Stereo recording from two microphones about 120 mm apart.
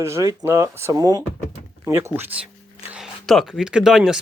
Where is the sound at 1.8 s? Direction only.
20° right (ahead or behind).